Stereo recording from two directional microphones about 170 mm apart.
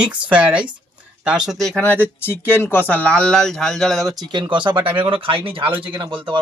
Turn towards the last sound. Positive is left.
turn(degrees=-30)  # may be behind; listen again after turning